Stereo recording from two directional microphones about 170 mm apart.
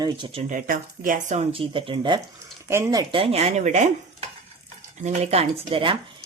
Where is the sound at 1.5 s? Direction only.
30° right (ahead or behind).